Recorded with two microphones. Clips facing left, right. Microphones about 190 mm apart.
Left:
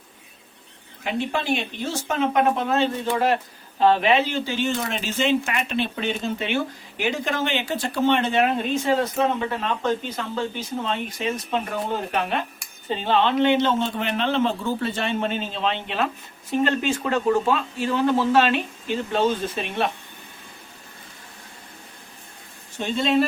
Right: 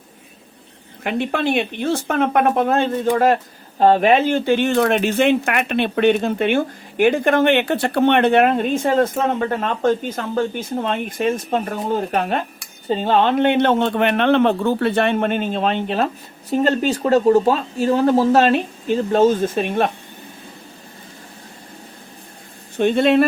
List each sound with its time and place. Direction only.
1.0 s speech: 60° right (ahead or behind)
22.8 s speech: 60° right (ahead or behind)